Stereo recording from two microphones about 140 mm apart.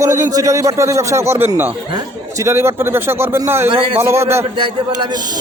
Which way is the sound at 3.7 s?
40° right (ahead or behind).